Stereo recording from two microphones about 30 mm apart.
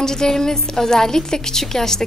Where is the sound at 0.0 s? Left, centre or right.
Centre.